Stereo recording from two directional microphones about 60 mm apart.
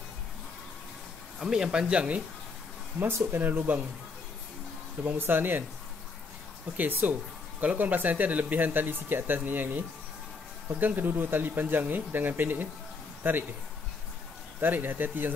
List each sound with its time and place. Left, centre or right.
1.4 s speech: centre
3.3 s speech: right
5.0 s speech: right
6.8 s a man's voice: right
14.6 s speech: right